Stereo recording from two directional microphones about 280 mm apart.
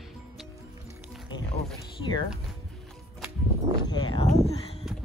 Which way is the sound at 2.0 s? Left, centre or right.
Centre.